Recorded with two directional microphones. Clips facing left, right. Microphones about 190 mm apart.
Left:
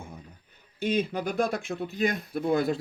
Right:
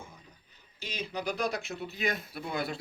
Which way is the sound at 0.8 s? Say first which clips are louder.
Left 10 dB; 55° left (ahead or behind).